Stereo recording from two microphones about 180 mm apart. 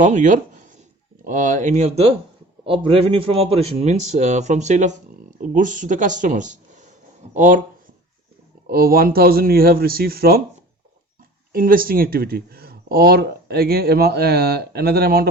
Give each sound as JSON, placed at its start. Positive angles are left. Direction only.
{"t": 0.0, "sound": "a man's voice", "side_deg": -45}
{"t": 8.7, "sound": "speech", "side_deg": -55}
{"t": 11.5, "sound": "speech", "side_deg": -55}